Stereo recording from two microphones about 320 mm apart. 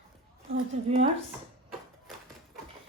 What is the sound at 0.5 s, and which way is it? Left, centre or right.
Speech, centre.